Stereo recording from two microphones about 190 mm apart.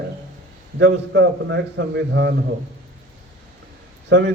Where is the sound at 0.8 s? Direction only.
65° right (ahead or behind).